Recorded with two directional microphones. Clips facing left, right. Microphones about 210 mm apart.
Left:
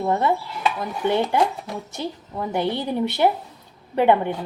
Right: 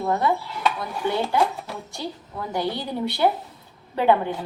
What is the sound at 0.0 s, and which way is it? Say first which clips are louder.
A woman's voice: left 2 dB; 25° left (ahead or behind).